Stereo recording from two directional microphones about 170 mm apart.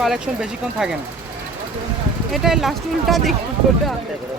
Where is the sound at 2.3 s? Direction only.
Centre (ahead or behind).